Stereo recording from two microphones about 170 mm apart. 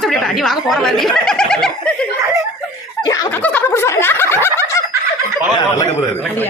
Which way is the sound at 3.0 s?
20° left (ahead or behind).